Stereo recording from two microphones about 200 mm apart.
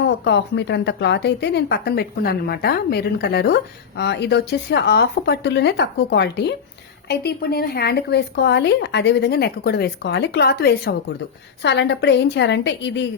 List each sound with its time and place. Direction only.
0.0 s a woman's voice: 60° left (ahead or behind)